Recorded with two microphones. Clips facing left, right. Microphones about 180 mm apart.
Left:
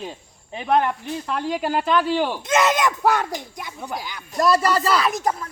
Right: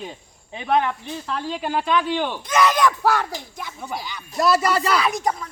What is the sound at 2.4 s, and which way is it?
Speech, 25° left (ahead or behind).